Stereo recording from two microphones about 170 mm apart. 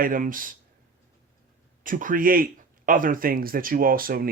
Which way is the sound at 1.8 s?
55° right (ahead or behind).